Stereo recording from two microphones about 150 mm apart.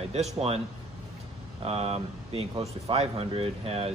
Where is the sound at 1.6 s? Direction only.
40° right (ahead or behind).